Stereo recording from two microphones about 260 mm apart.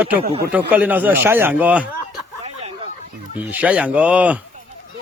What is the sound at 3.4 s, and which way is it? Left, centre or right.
Speech, centre.